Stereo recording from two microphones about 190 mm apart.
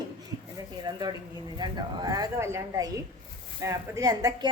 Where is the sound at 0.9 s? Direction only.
20° right (ahead or behind).